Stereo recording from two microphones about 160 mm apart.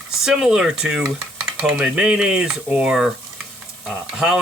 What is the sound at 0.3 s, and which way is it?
Speech, 5° right (ahead or behind).